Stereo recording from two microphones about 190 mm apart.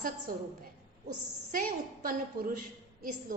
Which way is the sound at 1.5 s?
50° right (ahead or behind).